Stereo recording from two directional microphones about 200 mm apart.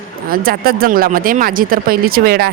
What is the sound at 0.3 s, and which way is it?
Speech, 50° right (ahead or behind).